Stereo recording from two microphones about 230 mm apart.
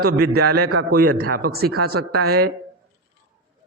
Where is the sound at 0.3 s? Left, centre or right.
Right.